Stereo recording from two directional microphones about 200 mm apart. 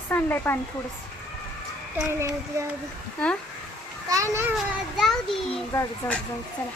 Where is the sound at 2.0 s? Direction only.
15° right (ahead or behind).